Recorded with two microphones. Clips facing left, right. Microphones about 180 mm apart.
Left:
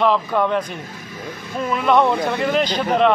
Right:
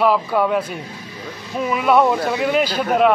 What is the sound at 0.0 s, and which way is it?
A man's voice, 5° right (ahead or behind).